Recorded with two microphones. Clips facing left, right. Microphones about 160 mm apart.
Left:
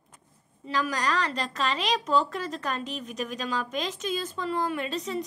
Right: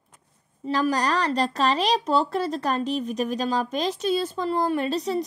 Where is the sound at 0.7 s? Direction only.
35° right (ahead or behind).